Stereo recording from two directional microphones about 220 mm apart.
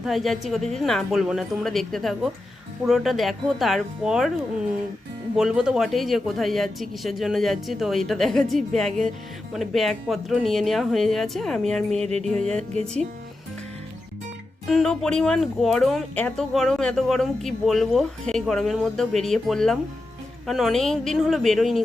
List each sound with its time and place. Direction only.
0.0 s speech: centre (ahead or behind)
5.4 s speech: centre (ahead or behind)
11.9 s music: 30° right (ahead or behind)
12.8 s speech: 5° left (ahead or behind)
14.7 s speech: centre (ahead or behind)